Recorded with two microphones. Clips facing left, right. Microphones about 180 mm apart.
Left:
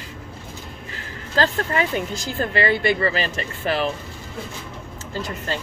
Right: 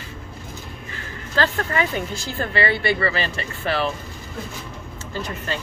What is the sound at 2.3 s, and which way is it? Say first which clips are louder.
Speech: left 2 dB; 40° left (ahead or behind).